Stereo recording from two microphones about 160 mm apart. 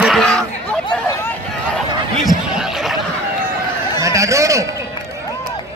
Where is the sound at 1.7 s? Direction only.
5° left (ahead or behind).